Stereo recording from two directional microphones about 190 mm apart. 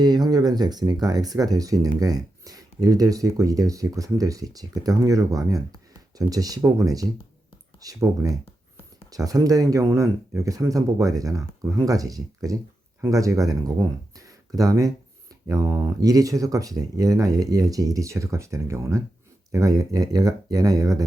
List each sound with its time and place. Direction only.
0.0 s speech: 20° right (ahead or behind)